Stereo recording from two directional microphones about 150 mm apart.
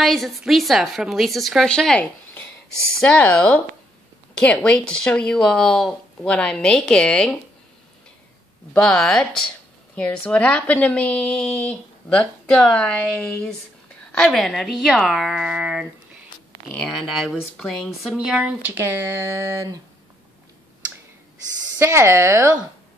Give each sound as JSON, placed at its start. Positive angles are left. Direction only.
{"t": 0.0, "sound": "a woman's voice", "side_deg": 0}
{"t": 8.7, "sound": "a woman's voice", "side_deg": 5}
{"t": 17.2, "sound": "speech", "side_deg": 0}
{"t": 21.7, "sound": "speech", "side_deg": -15}